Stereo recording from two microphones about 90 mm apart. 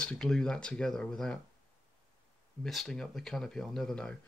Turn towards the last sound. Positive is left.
turn(degrees=5)  # may be behind; listen again after turning